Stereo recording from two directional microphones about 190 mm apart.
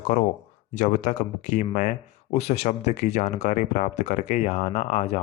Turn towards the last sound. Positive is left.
turn(degrees=35)  # may be behind; listen again after turning